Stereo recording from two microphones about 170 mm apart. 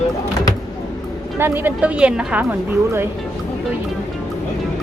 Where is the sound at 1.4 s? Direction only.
10° right (ahead or behind).